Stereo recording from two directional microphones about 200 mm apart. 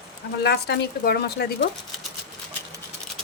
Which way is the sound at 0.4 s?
55° left (ahead or behind).